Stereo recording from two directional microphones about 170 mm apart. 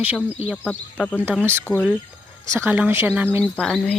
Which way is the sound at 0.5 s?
10° left (ahead or behind).